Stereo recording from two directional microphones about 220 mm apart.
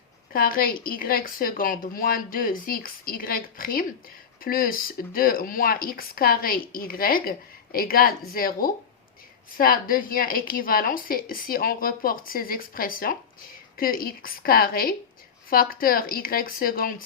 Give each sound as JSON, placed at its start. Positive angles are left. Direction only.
{"t": 0.3, "sound": "speech", "side_deg": 40}